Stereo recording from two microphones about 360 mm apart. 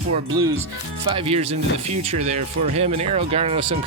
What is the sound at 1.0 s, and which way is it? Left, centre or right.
Speech, centre.